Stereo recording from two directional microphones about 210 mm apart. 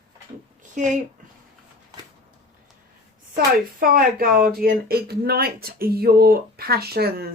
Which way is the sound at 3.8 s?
45° right (ahead or behind).